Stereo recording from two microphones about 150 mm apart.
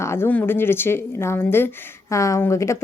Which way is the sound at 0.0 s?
15° left (ahead or behind).